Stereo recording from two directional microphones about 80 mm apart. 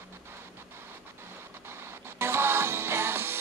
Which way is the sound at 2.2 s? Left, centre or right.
Right.